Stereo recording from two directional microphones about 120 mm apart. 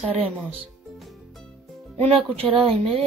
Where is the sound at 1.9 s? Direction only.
55° right (ahead or behind).